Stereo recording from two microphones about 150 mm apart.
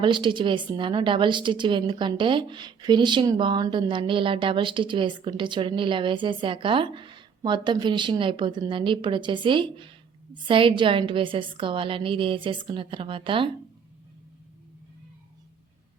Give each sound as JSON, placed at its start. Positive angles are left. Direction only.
{"t": 0.0, "sound": "a woman's voice", "side_deg": -30}